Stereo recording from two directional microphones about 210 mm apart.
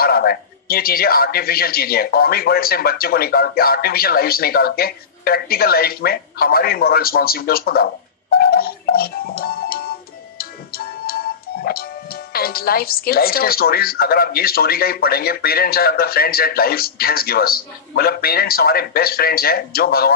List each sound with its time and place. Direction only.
0.0 s speech: 45° left (ahead or behind)